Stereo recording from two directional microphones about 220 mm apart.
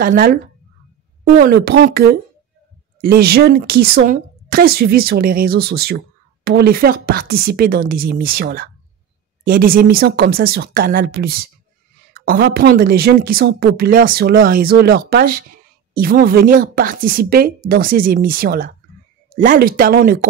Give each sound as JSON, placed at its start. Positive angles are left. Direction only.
{"t": 0.0, "sound": "a woman's voice", "side_deg": -40}